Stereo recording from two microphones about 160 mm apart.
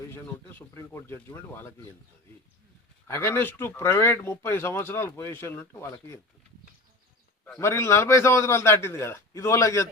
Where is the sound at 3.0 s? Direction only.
15° left (ahead or behind).